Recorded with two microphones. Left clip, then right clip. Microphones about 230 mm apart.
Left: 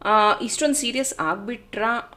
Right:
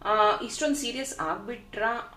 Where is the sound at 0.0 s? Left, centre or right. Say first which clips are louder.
Left 5 dB; left.